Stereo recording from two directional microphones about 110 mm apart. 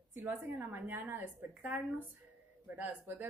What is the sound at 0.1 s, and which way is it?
Speech, 15° right (ahead or behind).